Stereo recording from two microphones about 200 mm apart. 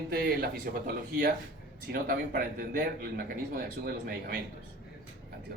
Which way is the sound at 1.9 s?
50° right (ahead or behind).